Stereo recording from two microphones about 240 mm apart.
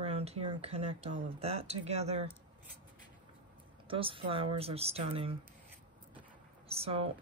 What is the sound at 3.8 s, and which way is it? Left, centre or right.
Speech, right.